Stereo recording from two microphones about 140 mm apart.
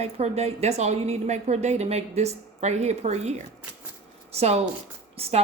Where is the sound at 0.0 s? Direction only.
50° right (ahead or behind).